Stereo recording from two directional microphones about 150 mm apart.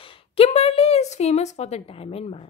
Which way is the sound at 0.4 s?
40° left (ahead or behind).